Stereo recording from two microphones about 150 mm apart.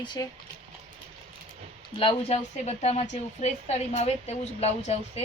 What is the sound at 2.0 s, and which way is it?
A woman's voice, 40° left (ahead or behind).